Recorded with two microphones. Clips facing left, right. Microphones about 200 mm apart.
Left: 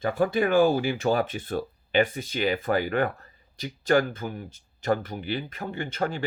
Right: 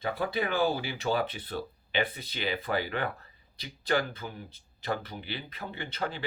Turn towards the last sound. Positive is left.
turn(degrees=45)  # may be behind; listen again after turning